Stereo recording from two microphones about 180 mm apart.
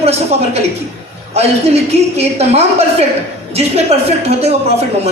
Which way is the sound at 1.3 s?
35° right (ahead or behind).